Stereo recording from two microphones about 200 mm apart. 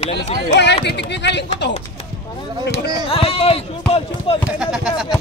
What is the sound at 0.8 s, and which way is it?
Speech, 60° left (ahead or behind).